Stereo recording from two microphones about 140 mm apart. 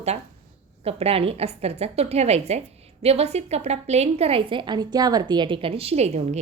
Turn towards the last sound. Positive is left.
turn(degrees=-50)  # may be behind; listen again after turning